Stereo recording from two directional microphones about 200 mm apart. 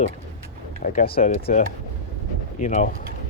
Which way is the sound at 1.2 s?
30° left (ahead or behind).